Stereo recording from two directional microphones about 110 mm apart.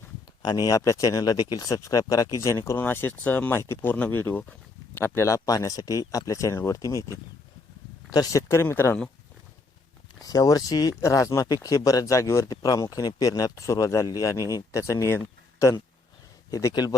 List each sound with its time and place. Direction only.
0.4 s speech: 35° left (ahead or behind); by 9.0 s 20° left (ahead or behind)
10.2 s speech: 35° left (ahead or behind)
16.5 s speech: 30° left (ahead or behind)